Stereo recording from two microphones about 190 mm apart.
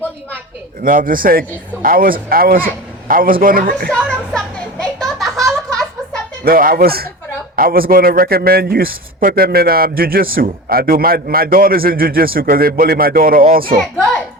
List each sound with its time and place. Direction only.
0.8 s a man's voice: 45° right (ahead or behind)
4.1 s a sound: 5° left (ahead or behind)
6.4 s a man's voice: 50° right (ahead or behind)